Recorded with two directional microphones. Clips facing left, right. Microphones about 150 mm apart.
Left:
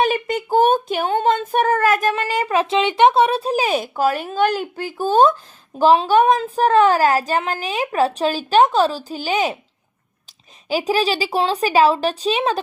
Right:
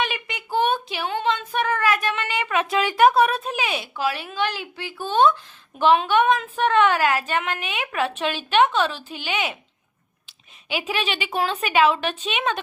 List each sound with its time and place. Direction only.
0.0 s a sound: 45° left (ahead or behind)
5.8 s a woman's voice: 35° left (ahead or behind)
10.7 s a woman's voice: 40° left (ahead or behind)